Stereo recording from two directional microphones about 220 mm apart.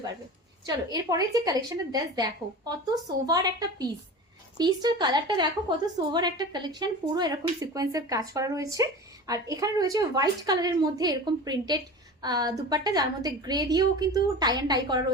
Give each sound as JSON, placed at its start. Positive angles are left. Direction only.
{"t": 0.7, "sound": "a woman's voice", "side_deg": -15}